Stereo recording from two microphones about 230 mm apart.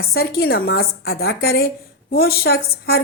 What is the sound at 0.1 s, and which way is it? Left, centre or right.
A woman's voice, left.